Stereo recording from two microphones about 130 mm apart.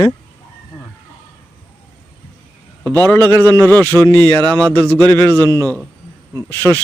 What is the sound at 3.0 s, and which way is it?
Speech, 15° left (ahead or behind).